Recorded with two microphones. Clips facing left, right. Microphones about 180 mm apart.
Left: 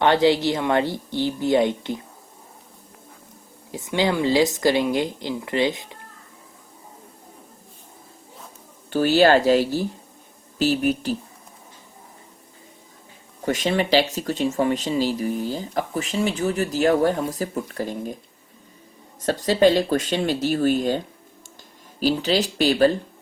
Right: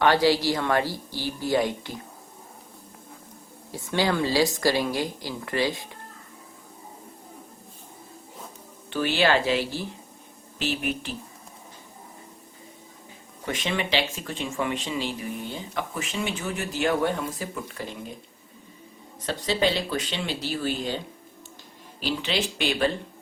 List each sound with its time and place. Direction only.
0.0 s speech: 25° left (ahead or behind)
3.7 s speech: 20° left (ahead or behind)
8.9 s speech: 40° left (ahead or behind)
13.4 s speech: 40° left (ahead or behind)
19.2 s speech: 45° left (ahead or behind)
22.0 s speech: 40° left (ahead or behind)